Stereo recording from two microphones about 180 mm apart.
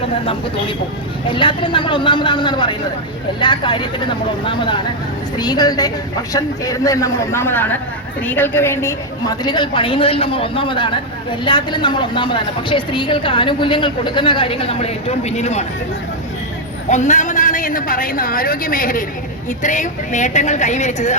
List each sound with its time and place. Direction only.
1.3 s a woman's voice: 25° left (ahead or behind)
16.9 s a woman's voice: 40° left (ahead or behind)